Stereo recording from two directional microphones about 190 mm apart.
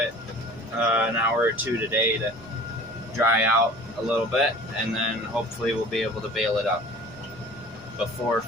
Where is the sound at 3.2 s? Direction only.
10° right (ahead or behind).